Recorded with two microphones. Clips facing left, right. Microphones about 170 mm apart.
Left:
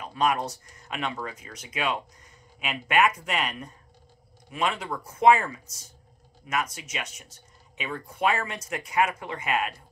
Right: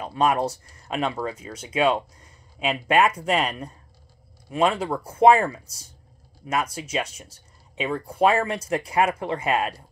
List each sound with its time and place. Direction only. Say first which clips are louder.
0.0 s speech: right 4 dB; 30° right (ahead or behind)